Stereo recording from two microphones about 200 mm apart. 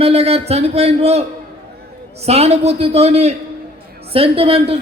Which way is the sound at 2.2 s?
30° right (ahead or behind).